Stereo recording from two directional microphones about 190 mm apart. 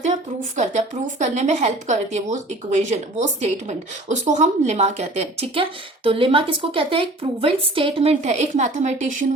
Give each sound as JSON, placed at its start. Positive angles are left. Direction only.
{"t": 0.5, "sound": "a woman's voice", "side_deg": -40}